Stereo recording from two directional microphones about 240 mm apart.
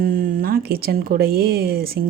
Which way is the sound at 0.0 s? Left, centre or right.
Right.